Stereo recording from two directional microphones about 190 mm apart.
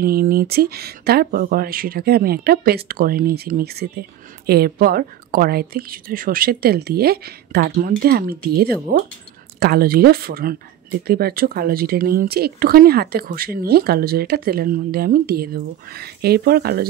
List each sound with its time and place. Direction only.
0.0 s speech: 50° right (ahead or behind)